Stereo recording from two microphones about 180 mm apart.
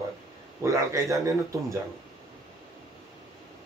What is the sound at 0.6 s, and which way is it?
Speech, 15° right (ahead or behind).